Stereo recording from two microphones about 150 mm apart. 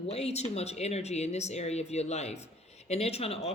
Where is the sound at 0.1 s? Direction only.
45° left (ahead or behind).